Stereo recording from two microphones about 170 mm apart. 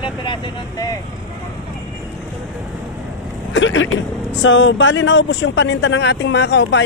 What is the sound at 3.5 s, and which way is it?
Speech, 90° left.